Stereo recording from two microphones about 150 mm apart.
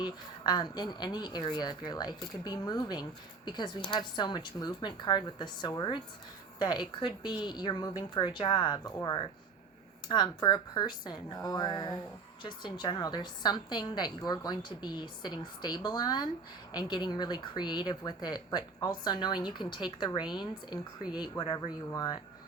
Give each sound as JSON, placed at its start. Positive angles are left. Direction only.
{"t": 0.0, "sound": "a woman's voice", "side_deg": 30}